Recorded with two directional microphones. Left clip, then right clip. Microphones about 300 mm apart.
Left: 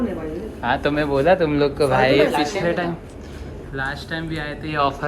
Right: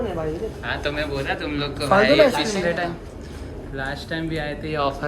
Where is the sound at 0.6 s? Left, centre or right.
Centre.